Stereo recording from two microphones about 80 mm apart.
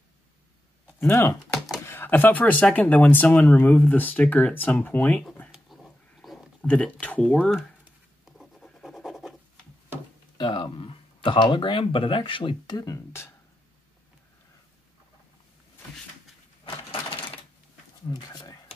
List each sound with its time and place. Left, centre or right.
0.9 s speech: left
5.8 s a sound: centre
6.7 s speech: centre
8.3 s scratch: centre
8.9 s scratch: centre
10.3 s speech: left
12.7 s speech: left
16.6 s a sound: left
18.1 s a sound: left